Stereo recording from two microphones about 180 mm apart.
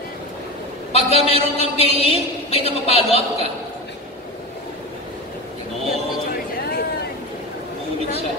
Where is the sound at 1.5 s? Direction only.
35° left (ahead or behind).